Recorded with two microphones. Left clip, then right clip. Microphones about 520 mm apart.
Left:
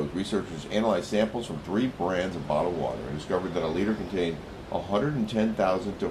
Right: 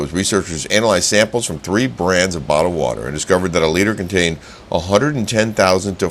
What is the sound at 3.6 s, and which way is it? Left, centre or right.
Speech, right.